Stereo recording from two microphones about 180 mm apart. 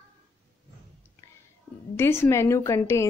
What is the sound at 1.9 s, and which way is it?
Speech, 15° left (ahead or behind).